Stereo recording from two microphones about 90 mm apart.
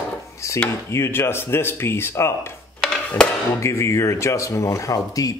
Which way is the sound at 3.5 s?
30° left (ahead or behind).